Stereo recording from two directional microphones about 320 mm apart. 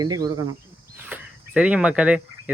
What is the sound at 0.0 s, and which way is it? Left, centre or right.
Speech, centre.